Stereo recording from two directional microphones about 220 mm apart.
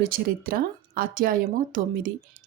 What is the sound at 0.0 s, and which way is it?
A woman's voice, 40° right (ahead or behind).